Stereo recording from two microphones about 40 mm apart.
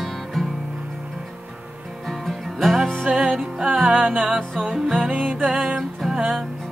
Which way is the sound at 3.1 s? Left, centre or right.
Right.